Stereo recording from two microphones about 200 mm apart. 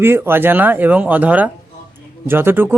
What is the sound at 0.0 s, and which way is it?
Speech, 10° right (ahead or behind).